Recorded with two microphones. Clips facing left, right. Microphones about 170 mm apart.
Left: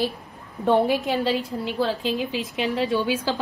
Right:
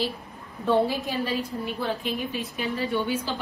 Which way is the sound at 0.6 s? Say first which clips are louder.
Left 3 dB; 65° left (ahead or behind).